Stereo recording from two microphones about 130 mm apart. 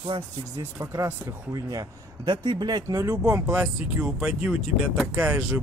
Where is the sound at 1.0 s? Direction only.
15° right (ahead or behind).